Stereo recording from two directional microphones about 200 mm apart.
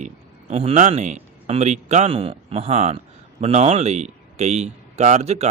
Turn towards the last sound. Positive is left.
turn(degrees=-30)  # may be behind; listen again after turning